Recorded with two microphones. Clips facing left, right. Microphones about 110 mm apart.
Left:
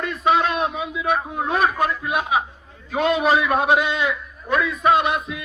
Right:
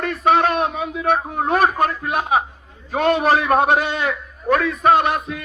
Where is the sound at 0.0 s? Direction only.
50° right (ahead or behind).